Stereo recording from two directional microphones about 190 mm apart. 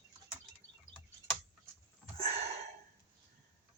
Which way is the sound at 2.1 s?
35° right (ahead or behind).